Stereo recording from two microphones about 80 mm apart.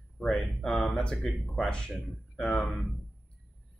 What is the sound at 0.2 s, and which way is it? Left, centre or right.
A man's voice, centre.